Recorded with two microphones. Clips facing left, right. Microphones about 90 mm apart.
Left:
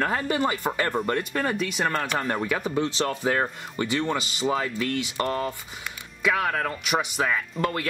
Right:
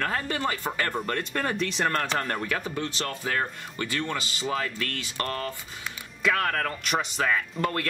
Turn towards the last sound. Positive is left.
turn(degrees=5)  # may be behind; listen again after turning